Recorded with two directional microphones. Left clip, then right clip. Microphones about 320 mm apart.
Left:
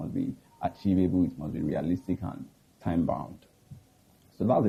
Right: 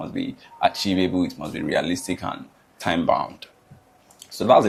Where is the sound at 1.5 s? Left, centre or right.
Centre.